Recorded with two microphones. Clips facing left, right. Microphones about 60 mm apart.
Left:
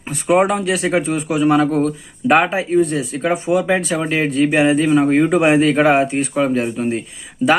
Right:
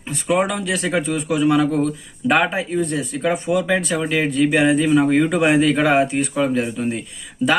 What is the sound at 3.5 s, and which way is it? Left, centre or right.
Speech, left.